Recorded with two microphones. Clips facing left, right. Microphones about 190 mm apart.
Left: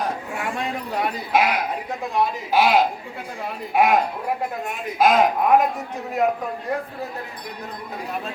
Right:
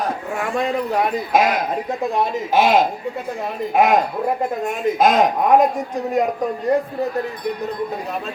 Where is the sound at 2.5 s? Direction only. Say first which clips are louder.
Right 3 dB; 45° right (ahead or behind).